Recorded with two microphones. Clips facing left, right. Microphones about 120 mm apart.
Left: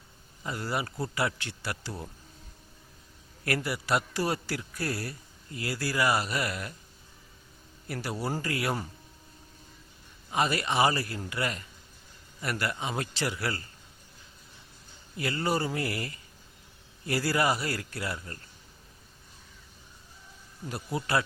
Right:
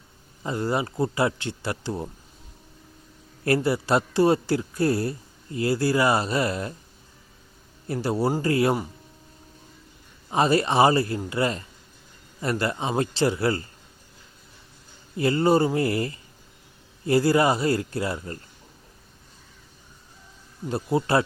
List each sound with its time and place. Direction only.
0.4 s a man's voice: 25° right (ahead or behind)
3.4 s a man's voice: 30° right (ahead or behind)
7.9 s a man's voice: 25° right (ahead or behind)
10.2 s a man's voice: 30° right (ahead or behind)
15.1 s a man's voice: 30° right (ahead or behind)
20.7 s a man's voice: 30° right (ahead or behind)